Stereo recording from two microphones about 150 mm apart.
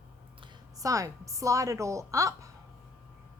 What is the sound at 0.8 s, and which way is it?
A woman's voice, 20° right (ahead or behind).